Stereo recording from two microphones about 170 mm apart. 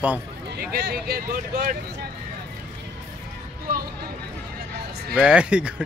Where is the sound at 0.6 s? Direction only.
70° right (ahead or behind); by 2.1 s 55° right (ahead or behind).